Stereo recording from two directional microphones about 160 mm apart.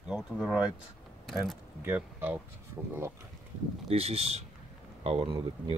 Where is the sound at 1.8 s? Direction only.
10° right (ahead or behind).